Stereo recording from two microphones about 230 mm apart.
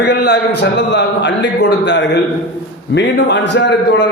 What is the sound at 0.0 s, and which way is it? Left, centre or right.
A man's voice, left.